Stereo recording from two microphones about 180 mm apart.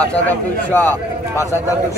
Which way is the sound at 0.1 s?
10° left (ahead or behind).